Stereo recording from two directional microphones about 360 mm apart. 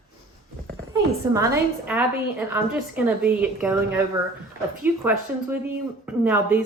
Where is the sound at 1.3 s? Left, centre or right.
Centre.